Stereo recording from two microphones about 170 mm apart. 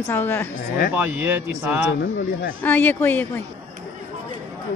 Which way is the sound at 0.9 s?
10° right (ahead or behind).